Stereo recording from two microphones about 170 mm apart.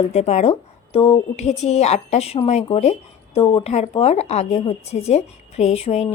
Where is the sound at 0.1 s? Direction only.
40° left (ahead or behind).